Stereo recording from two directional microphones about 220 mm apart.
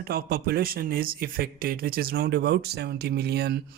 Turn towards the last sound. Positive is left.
turn(degrees=-45)  # may be behind; listen again after turning